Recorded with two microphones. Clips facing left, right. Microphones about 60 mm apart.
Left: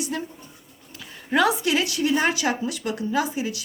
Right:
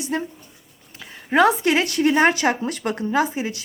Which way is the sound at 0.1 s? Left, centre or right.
Right.